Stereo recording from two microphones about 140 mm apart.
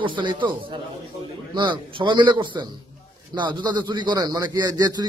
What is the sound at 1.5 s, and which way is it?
A man's voice, 35° right (ahead or behind).